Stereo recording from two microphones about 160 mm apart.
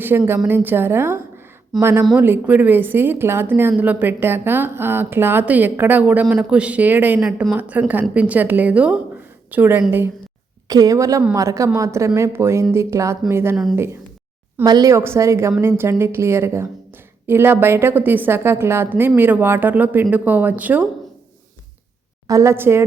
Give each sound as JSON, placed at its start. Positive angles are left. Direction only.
{"t": 0.0, "sound": "a woman's voice", "side_deg": -15}
{"t": 10.7, "sound": "a woman's voice", "side_deg": -25}
{"t": 14.6, "sound": "a woman's voice", "side_deg": -25}
{"t": 22.3, "sound": "a woman's voice", "side_deg": -20}